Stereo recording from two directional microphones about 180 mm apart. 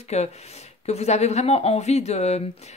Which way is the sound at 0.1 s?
35° left (ahead or behind).